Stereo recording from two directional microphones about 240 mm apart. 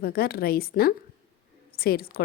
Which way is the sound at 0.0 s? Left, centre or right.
Left.